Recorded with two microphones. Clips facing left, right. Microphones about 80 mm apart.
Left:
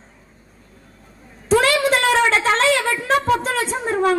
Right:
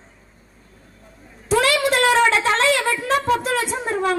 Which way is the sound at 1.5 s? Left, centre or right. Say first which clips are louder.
Left 2 dB; left.